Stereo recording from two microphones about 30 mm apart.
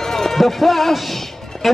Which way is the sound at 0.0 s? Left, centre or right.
Centre.